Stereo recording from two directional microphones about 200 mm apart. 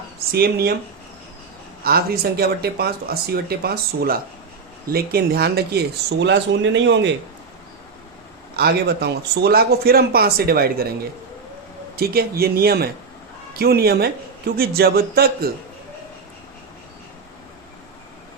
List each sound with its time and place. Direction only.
0.3 s speech: 50° right (ahead or behind)
1.8 s speech: 50° right (ahead or behind)
8.5 s speech: 55° right (ahead or behind)
11.9 s speech: 50° right (ahead or behind)